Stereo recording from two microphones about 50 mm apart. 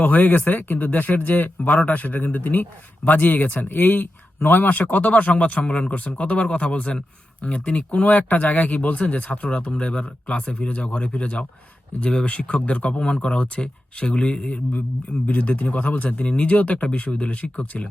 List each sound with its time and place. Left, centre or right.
0.0 s speech: left